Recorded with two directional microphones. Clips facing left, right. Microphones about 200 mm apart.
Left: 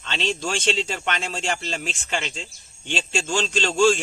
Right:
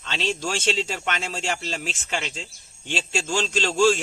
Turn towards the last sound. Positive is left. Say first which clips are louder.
# left 1 dB
turn(degrees=-5)  # may be behind; listen again after turning